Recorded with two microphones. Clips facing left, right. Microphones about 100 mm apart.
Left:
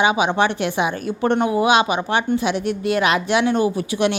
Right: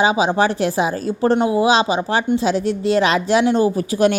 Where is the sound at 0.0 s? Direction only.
30° right (ahead or behind).